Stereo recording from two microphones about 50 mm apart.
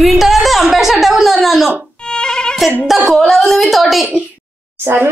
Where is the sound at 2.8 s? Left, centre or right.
Centre.